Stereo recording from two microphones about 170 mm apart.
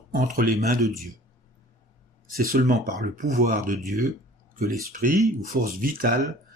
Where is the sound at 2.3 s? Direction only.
55° right (ahead or behind).